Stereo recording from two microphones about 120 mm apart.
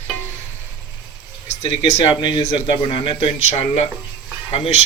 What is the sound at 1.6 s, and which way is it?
Speech, 60° left (ahead or behind).